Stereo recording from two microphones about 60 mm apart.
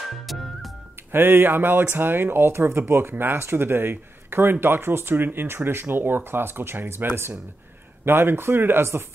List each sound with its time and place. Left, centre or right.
0.1 s music: centre
1.1 s speech: right